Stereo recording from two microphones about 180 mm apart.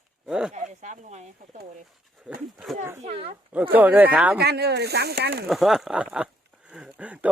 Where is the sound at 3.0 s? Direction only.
35° right (ahead or behind).